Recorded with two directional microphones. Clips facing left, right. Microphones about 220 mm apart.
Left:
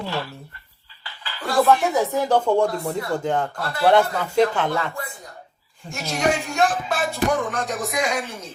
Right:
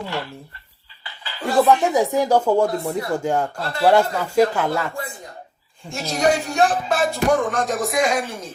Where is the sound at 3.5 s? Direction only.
25° right (ahead or behind).